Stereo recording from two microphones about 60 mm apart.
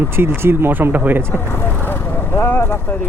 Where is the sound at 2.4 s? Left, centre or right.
Left.